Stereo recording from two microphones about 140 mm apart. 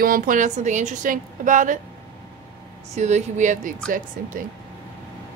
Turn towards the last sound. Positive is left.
turn(degrees=-70)  # may be behind; listen again after turning